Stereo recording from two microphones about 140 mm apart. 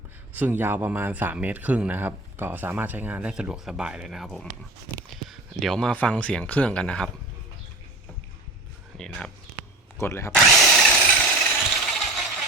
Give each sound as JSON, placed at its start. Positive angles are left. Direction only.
{"t": 0.3, "sound": "speech", "side_deg": -15}
{"t": 9.0, "sound": "speech", "side_deg": 5}
{"t": 10.0, "sound": "speech", "side_deg": 20}
{"t": 10.3, "sound": "drill", "side_deg": 0}
{"t": 11.7, "sound": "vehicle", "side_deg": 0}